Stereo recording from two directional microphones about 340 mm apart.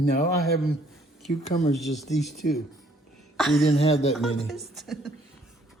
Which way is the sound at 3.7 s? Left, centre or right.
Centre.